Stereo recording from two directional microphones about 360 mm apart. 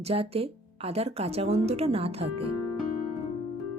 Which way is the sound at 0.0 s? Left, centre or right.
Centre.